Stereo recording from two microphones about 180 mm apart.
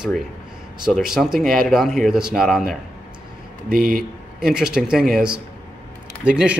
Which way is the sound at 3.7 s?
50° right (ahead or behind).